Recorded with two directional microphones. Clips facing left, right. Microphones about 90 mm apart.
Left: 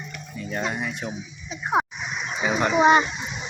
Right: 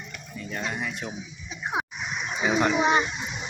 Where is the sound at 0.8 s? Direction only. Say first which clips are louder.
Left 2 dB; 5° left (ahead or behind).